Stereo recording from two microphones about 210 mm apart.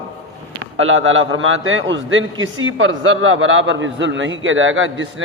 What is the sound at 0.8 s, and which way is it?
A man's voice, 70° right (ahead or behind).